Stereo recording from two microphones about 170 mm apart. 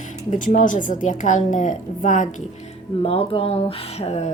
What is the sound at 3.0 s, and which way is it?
A woman's voice, 35° left (ahead or behind).